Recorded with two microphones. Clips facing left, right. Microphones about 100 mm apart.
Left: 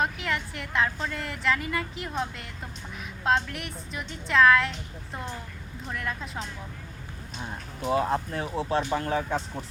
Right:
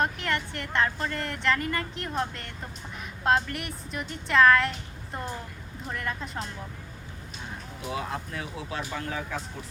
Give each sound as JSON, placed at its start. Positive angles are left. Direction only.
{"t": 0.0, "sound": "speech", "side_deg": 0}
{"t": 7.9, "sound": "speech", "side_deg": 40}